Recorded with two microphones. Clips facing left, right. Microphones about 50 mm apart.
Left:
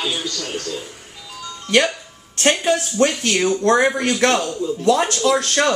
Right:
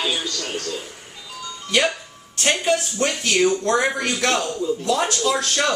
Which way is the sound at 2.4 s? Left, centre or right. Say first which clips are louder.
Left 3 dB; left.